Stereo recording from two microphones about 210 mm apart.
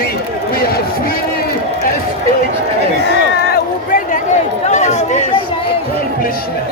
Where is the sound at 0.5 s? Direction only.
45° left (ahead or behind).